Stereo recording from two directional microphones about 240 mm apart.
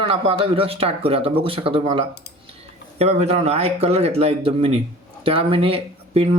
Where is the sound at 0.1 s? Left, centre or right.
Right.